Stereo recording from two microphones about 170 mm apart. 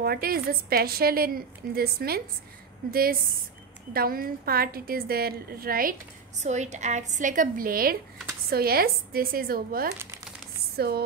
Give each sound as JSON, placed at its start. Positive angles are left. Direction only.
{"t": 0.0, "sound": "a woman's voice", "side_deg": -65}
{"t": 6.4, "sound": "a woman's voice", "side_deg": -45}
{"t": 10.8, "sound": "a sound", "side_deg": -70}